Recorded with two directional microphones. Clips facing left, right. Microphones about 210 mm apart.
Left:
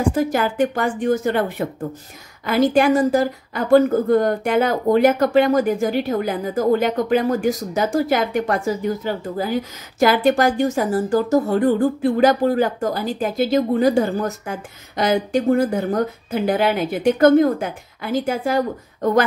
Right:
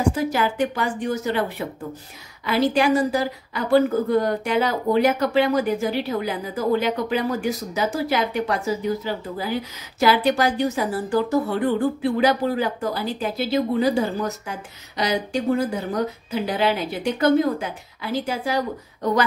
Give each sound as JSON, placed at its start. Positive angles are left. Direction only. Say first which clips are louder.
{"t": 0.1, "sound": "speech", "louder": "left 3 dB", "side_deg": 50}